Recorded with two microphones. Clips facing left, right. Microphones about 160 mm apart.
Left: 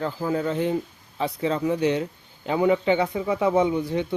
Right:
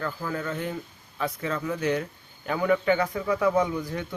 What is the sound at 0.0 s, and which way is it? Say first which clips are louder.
Speech: left 6 dB; 25° left (ahead or behind).